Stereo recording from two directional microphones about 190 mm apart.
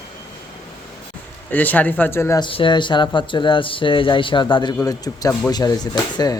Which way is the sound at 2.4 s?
25° left (ahead or behind).